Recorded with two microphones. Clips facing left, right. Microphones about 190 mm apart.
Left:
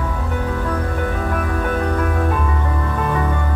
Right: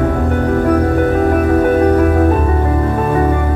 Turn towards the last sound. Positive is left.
turn(degrees=-45)  # may be behind; listen again after turning